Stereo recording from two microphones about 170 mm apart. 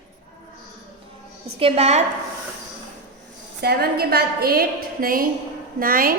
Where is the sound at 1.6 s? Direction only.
40° right (ahead or behind).